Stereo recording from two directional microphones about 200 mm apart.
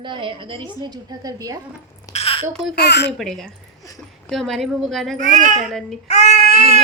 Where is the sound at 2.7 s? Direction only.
55° left (ahead or behind).